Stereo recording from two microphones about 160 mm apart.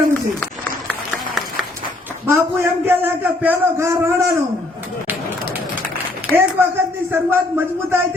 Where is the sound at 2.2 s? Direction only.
15° right (ahead or behind).